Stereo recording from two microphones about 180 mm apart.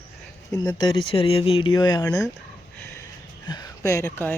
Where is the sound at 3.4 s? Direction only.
20° left (ahead or behind).